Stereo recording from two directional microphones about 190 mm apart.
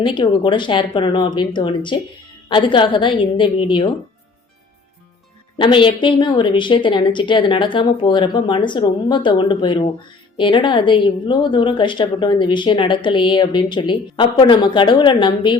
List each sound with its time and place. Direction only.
0.0 s a woman's voice: 25° left (ahead or behind)
5.5 s a woman's voice: 25° left (ahead or behind)